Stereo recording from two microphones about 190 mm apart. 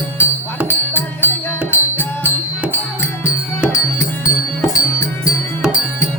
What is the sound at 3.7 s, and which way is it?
Music, 15° left (ahead or behind).